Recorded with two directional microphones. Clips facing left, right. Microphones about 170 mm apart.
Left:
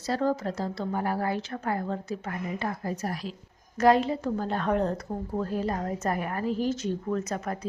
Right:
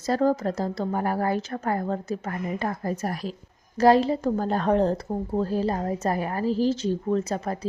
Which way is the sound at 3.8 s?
35° right (ahead or behind).